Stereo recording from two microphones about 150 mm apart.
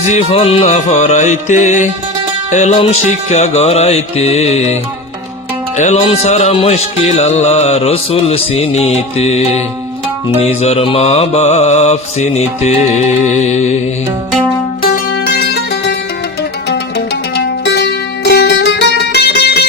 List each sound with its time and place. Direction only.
0.1 s music: 40° left (ahead or behind)
14.8 s music: 85° left
17.3 s music: 90° left